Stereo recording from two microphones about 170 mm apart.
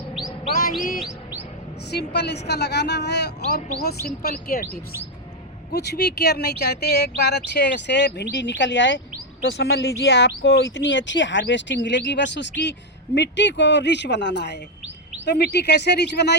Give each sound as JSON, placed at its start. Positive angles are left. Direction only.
{"t": 0.2, "sound": "chirp", "side_deg": 25}
{"t": 0.9, "sound": "chirp", "side_deg": -5}
{"t": 1.9, "sound": "a woman's voice", "side_deg": 80}
{"t": 3.8, "sound": "speech", "side_deg": 65}
{"t": 5.7, "sound": "speech", "side_deg": 75}
{"t": 9.4, "sound": "speech", "side_deg": 80}
{"t": 10.0, "sound": "speech", "side_deg": 90}
{"t": 15.3, "sound": "a woman's voice", "side_deg": 80}